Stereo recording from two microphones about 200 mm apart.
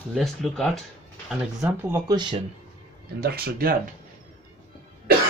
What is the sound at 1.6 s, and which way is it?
Speech, 15° right (ahead or behind).